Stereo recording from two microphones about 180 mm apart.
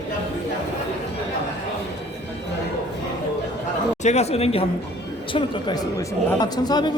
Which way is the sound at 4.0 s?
40° left (ahead or behind).